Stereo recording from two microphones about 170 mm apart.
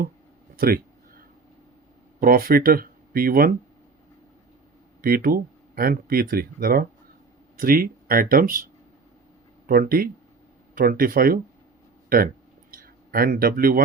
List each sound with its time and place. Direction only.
0.5 s a sound: 60° right (ahead or behind)
2.2 s speech: 60° right (ahead or behind)
5.0 s speech: 60° right (ahead or behind)